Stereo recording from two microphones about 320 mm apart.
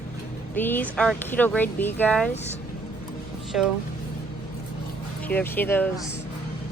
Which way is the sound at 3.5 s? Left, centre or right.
Centre.